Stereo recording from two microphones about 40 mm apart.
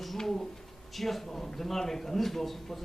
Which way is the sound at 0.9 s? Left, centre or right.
Centre.